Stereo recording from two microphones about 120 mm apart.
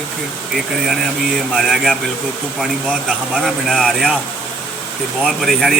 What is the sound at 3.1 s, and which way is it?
A man's voice, centre (ahead or behind).